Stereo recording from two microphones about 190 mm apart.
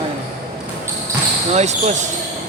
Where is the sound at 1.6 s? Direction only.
35° right (ahead or behind).